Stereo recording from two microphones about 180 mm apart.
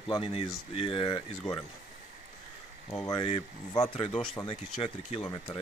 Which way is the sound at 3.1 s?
30° left (ahead or behind).